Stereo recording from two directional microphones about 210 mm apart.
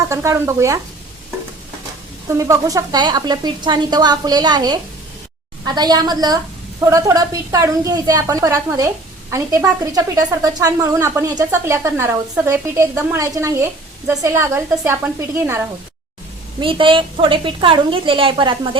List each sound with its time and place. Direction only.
0.1 s a woman's voice: 15° right (ahead or behind)
2.4 s a woman's voice: 15° right (ahead or behind)
16.6 s speech: 25° right (ahead or behind)